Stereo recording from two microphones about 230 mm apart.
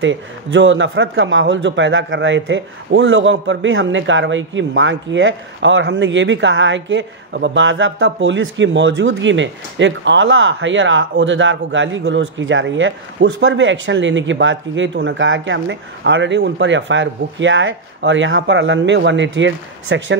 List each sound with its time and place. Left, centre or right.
0.0 s a man's voice: right